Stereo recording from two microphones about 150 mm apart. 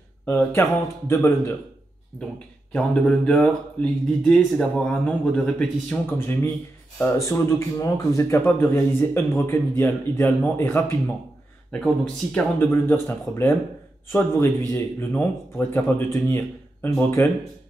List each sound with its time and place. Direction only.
0.2 s speech: 15° left (ahead or behind)
2.7 s speech: 5° left (ahead or behind)